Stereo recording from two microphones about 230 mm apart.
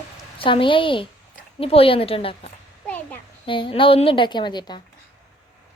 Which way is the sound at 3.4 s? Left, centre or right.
Left.